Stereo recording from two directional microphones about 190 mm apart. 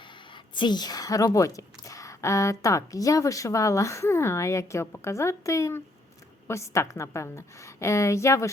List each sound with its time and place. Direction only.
0.5 s a woman's voice: 25° left (ahead or behind)